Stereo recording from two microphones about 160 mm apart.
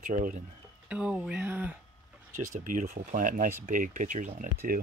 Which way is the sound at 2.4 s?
55° right (ahead or behind).